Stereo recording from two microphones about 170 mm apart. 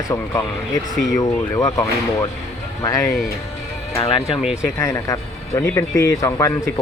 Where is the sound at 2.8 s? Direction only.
20° left (ahead or behind).